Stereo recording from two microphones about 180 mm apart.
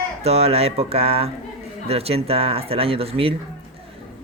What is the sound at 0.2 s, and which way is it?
Speech, 35° right (ahead or behind).